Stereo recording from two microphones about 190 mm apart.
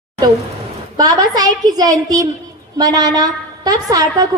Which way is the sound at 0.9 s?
20° right (ahead or behind).